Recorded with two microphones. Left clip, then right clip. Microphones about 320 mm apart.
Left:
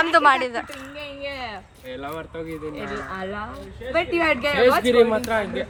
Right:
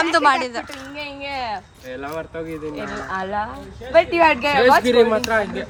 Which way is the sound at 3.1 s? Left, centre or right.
Centre.